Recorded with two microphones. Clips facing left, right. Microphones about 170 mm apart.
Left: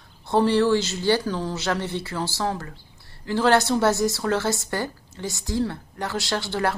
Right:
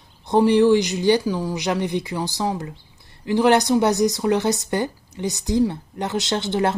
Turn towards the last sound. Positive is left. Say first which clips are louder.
# right 4 dB
turn(degrees=-20)  # may be behind; listen again after turning